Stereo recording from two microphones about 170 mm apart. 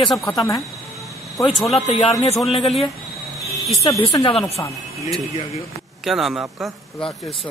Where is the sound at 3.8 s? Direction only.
20° left (ahead or behind).